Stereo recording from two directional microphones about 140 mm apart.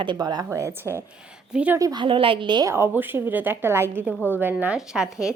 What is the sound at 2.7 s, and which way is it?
A woman's voice, 15° right (ahead or behind).